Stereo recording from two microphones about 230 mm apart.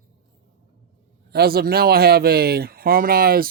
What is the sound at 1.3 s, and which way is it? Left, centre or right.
Speech, right.